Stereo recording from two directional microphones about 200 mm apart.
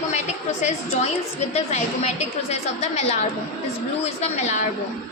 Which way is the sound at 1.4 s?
35° left (ahead or behind).